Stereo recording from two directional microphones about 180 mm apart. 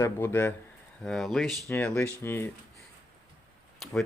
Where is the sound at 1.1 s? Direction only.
Centre (ahead or behind).